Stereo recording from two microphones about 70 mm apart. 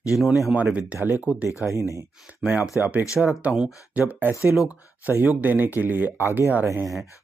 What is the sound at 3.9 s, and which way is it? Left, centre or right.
Speech, right.